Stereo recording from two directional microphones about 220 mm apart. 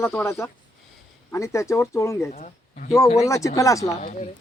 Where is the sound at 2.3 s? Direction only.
35° left (ahead or behind).